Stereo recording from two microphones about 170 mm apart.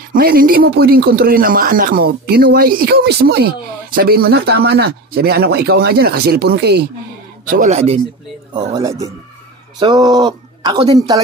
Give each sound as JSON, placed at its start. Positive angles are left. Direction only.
{"t": 0.1, "sound": "speech", "side_deg": -60}
{"t": 7.4, "sound": "speech", "side_deg": -50}
{"t": 8.5, "sound": "speech", "side_deg": -20}